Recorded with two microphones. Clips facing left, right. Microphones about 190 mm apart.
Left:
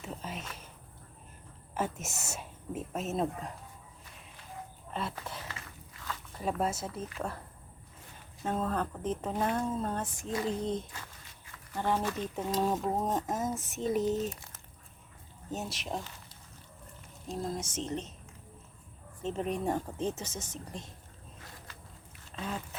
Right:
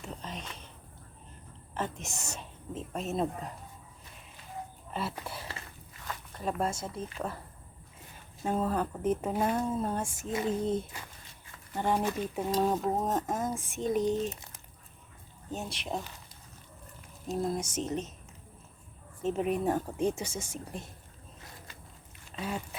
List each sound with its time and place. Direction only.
0.0 s a sound: 5° left (ahead or behind)
1.7 s speech: 5° left (ahead or behind)
4.9 s speech: 10° right (ahead or behind)
6.3 s speech: 5° left (ahead or behind)
8.4 s speech: 10° right (ahead or behind)
14.3 s speech: 20° right (ahead or behind)
15.5 s speech: centre (ahead or behind)
17.6 s speech: 30° left (ahead or behind)
19.2 s speech: 10° right (ahead or behind)
22.4 s duck: 10° right (ahead or behind)